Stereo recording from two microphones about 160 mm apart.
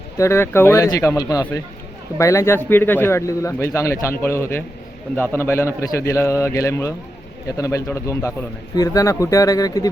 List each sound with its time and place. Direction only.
0.2 s a man's voice: 15° left (ahead or behind)